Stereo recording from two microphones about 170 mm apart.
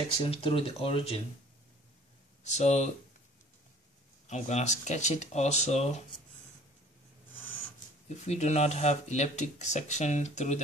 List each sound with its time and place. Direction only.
0.3 s speech: 30° left (ahead or behind)
2.4 s speech: 40° left (ahead or behind)
4.3 s speech: 40° left (ahead or behind)
8.1 s speech: 40° left (ahead or behind)